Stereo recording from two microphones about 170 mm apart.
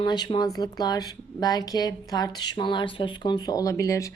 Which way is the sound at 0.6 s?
25° left (ahead or behind).